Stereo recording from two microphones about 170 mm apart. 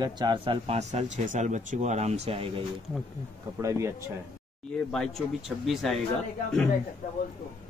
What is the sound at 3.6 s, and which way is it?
Speech, 15° right (ahead or behind).